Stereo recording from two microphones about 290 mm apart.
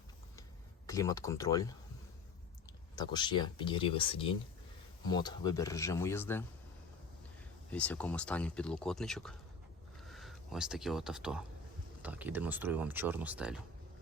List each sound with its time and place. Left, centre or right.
0.9 s speech: centre
2.9 s speech: centre
7.7 s speech: centre